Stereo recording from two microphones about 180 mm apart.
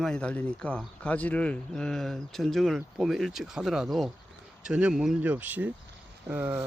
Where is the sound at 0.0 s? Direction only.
5° left (ahead or behind).